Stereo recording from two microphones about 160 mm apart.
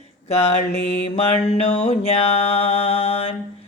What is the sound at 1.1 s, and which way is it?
Mantra, 40° left (ahead or behind).